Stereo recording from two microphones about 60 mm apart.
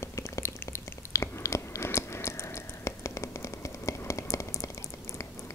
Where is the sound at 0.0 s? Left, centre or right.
Left.